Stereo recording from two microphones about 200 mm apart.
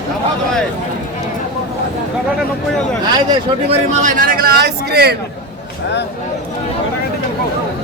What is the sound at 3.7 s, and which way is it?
Speech, 40° right (ahead or behind).